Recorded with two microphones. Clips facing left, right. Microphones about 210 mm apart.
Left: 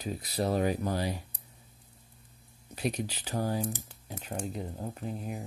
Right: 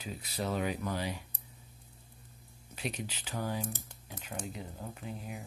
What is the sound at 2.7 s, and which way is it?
Speech, 40° left (ahead or behind).